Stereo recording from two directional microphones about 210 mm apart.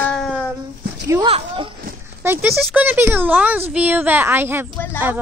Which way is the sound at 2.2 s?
10° right (ahead or behind).